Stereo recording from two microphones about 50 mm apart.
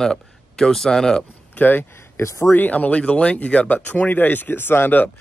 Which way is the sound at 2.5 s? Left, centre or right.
Left.